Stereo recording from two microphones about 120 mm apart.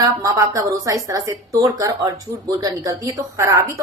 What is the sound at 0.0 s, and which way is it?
A woman's voice, 25° right (ahead or behind).